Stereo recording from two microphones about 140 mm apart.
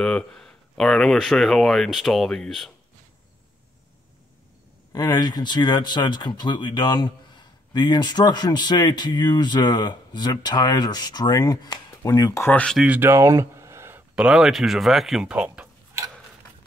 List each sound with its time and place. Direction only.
0.0 s speech: 5° left (ahead or behind)
4.9 s speech: 30° left (ahead or behind)
12.4 s speech: 10° left (ahead or behind)
12.7 s speech: 10° right (ahead or behind)
14.1 s speech: 5° right (ahead or behind)